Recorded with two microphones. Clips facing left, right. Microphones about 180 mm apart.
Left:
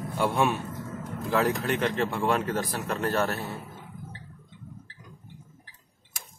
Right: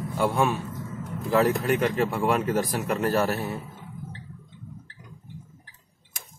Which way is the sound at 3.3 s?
15° right (ahead or behind).